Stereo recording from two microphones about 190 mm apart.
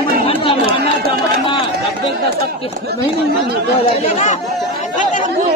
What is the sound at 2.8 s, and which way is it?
Speech, 55° right (ahead or behind).